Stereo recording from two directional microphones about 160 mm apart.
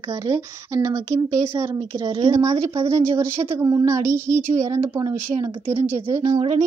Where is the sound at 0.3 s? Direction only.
20° right (ahead or behind).